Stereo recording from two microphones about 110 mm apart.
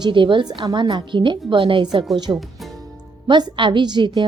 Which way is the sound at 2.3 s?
40° right (ahead or behind).